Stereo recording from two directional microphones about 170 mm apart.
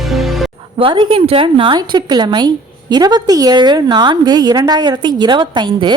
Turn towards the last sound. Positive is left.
turn(degrees=-30)  # may be behind; listen again after turning